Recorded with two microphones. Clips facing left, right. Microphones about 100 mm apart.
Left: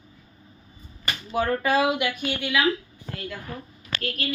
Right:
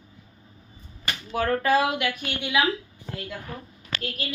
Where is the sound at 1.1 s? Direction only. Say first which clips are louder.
Even; 10° left (ahead or behind).